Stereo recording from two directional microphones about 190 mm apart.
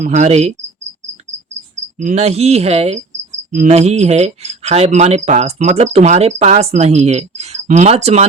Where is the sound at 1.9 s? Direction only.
35° right (ahead or behind).